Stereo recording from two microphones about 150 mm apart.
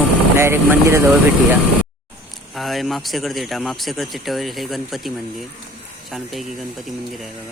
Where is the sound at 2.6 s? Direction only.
Centre (ahead or behind).